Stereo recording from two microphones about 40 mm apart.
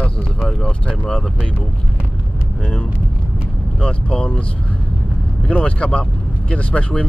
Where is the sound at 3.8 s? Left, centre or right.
Left.